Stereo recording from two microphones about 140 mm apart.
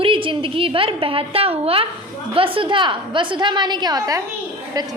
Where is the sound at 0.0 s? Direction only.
40° right (ahead or behind).